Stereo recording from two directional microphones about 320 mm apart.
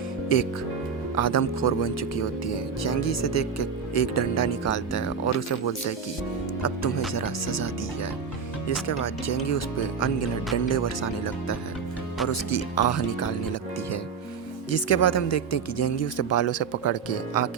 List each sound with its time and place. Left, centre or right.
0.3 s speech: left
8.9 s speech: left